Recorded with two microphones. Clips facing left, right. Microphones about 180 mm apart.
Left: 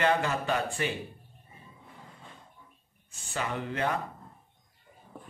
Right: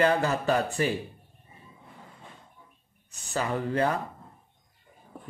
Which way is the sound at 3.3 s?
40° right (ahead or behind).